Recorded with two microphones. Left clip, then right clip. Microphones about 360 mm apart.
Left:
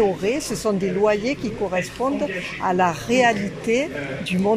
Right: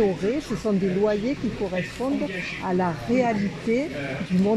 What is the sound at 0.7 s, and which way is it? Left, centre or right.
Speech, left.